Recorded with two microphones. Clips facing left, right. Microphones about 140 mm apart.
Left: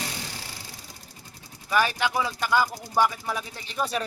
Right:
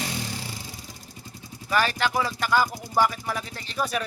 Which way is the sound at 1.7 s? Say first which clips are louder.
Even; 15° left (ahead or behind).